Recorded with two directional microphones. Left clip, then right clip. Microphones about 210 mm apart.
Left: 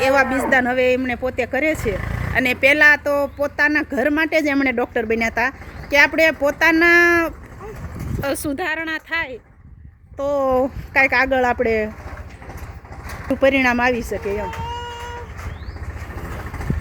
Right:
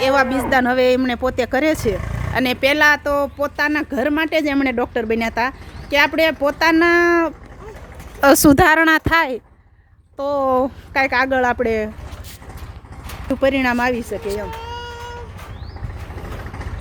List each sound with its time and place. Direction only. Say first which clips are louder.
0.0 s a man's voice: even; 10° right (ahead or behind)
8.2 s speech: right 12 dB; 50° right (ahead or behind)
10.2 s speech: right 1 dB; 10° right (ahead or behind)
13.2 s speech: left 1 dB; 5° right (ahead or behind)